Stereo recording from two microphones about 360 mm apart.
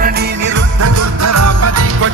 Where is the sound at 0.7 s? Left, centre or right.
Right.